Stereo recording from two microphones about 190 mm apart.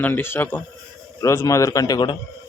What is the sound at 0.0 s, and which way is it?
Speech, 10° left (ahead or behind).